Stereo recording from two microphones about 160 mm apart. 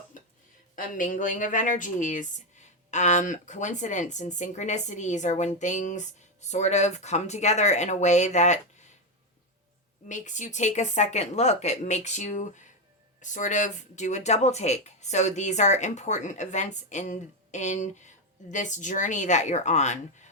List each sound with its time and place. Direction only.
0.8 s speech: 55° left (ahead or behind)
10.1 s speech: 50° left (ahead or behind)